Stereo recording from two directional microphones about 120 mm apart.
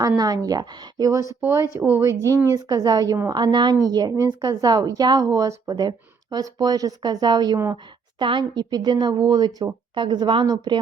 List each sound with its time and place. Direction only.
0.2 s a woman's voice: 30° right (ahead or behind)